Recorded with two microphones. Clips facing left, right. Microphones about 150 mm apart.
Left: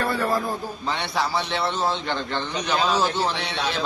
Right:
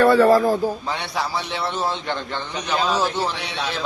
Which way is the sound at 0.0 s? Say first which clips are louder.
Right 10 dB; 90° right.